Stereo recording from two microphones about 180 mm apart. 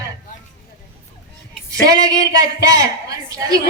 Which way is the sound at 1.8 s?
20° right (ahead or behind).